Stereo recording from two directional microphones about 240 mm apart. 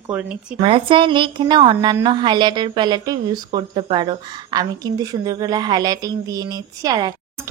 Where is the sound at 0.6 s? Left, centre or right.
Right.